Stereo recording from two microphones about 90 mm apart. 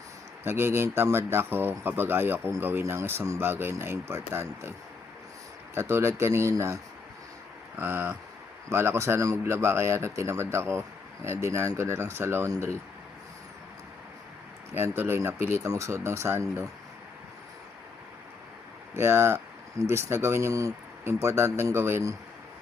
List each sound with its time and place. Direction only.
0.4 s a man's voice: 25° right (ahead or behind)
5.7 s a man's voice: 30° right (ahead or behind)
7.8 s a man's voice: 25° right (ahead or behind)
14.7 s a man's voice: 25° right (ahead or behind)
18.9 s a man's voice: 30° right (ahead or behind)